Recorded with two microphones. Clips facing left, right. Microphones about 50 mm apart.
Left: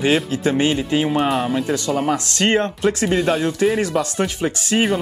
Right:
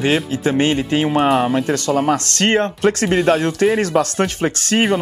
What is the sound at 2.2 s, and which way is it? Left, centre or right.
Speech, right.